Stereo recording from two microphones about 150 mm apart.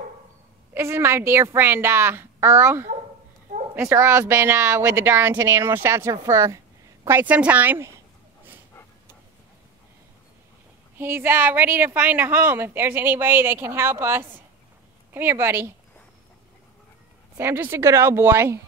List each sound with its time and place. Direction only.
0.7 s a woman's voice: 15° right (ahead or behind)
11.0 s a woman's voice: 15° right (ahead or behind)
17.4 s a woman's voice: 15° right (ahead or behind)